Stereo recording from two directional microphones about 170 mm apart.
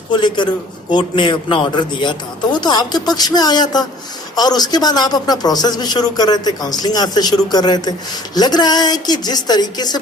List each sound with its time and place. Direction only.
0.2 s a man's voice: 25° left (ahead or behind)